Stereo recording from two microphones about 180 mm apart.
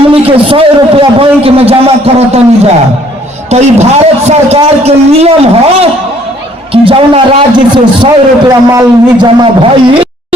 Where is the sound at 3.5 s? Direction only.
35° right (ahead or behind).